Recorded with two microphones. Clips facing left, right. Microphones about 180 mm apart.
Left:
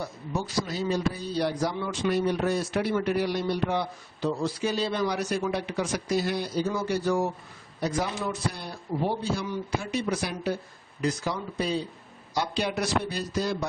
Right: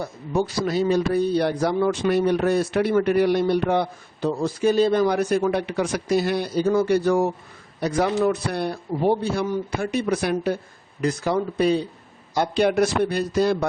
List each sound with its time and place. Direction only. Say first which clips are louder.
0.0 s a man's voice: right 8 dB; 60° right (ahead or behind)